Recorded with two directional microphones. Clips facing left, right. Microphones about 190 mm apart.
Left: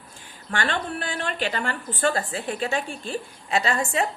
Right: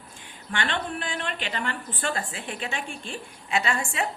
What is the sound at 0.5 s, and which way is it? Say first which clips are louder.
A woman's voice: left 2 dB; 40° left (ahead or behind).